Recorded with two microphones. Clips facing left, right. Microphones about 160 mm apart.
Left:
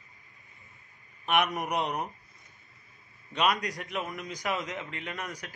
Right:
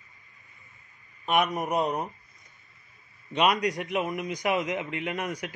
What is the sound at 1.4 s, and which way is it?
Speech, centre (ahead or behind).